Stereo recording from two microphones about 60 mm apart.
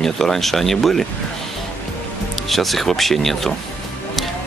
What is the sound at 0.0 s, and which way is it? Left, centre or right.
Speech, centre.